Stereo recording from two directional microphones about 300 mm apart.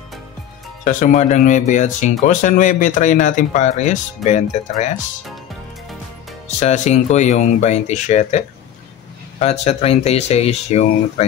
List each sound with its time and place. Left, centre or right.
0.8 s speech: left
6.6 s speech: left